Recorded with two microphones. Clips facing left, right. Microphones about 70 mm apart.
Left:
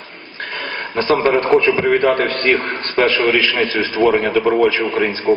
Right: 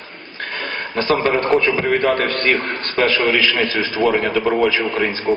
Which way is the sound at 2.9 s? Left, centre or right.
Left.